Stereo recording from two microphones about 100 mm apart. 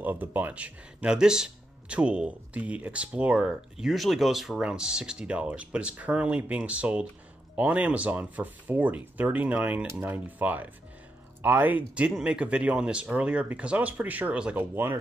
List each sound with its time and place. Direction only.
0.0 s speech: 15° right (ahead or behind)